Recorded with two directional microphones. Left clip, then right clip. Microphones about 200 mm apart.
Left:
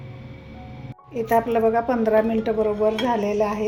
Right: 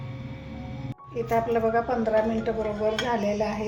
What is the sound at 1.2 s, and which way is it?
A woman's voice, 50° left (ahead or behind).